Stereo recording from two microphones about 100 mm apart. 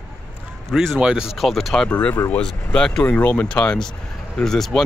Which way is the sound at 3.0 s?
20° left (ahead or behind).